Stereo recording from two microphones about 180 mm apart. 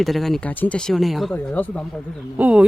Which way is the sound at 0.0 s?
Centre (ahead or behind).